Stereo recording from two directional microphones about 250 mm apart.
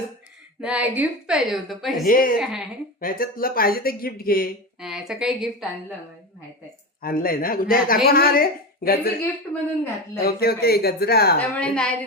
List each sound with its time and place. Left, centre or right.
0.6 s a woman's voice: centre
2.0 s speech: left
2.4 s a woman's voice: centre
3.0 s speech: left
4.8 s a woman's voice: centre
7.0 s speech: left
10.2 s speech: left
11.3 s a woman's voice: centre